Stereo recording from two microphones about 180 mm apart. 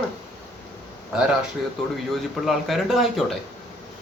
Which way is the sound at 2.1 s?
Centre (ahead or behind).